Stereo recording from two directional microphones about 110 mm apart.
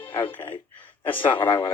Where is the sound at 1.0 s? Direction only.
50° left (ahead or behind).